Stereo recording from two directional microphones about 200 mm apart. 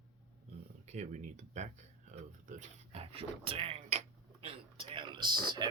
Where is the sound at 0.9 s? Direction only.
35° right (ahead or behind).